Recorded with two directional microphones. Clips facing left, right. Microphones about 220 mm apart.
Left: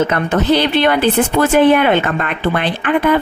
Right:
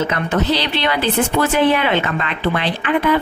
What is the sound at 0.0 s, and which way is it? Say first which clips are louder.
Speech: left 3 dB; 50° left (ahead or behind).